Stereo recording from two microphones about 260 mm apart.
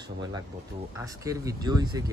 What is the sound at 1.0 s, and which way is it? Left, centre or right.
Speech, centre.